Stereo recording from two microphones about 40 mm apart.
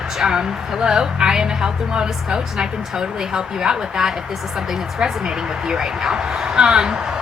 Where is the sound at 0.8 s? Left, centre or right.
Centre.